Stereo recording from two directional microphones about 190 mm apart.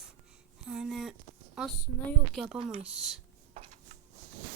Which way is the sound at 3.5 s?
40° right (ahead or behind).